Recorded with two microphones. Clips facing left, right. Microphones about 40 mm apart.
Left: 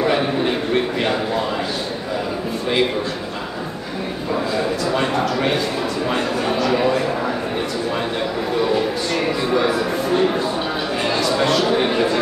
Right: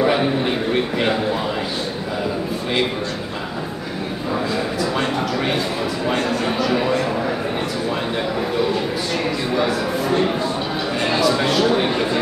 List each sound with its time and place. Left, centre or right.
0.0 s a man's voice: centre
4.6 s a man's voice: centre
9.5 s speech: centre